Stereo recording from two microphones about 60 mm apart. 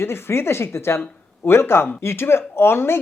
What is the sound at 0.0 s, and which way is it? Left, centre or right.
Speech, left.